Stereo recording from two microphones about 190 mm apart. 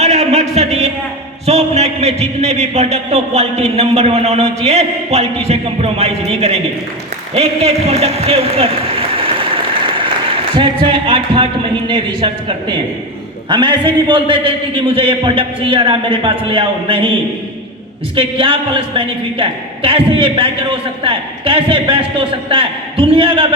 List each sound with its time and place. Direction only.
0.0 s a sound: 35° right (ahead or behind)
1.5 s a man's voice: 35° right (ahead or behind)
18.2 s a man's voice: 30° right (ahead or behind)